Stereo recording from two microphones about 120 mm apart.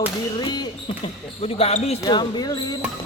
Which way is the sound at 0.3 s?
35° left (ahead or behind).